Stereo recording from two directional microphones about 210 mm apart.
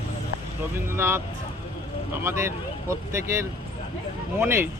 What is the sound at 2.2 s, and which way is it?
Speech, 10° right (ahead or behind).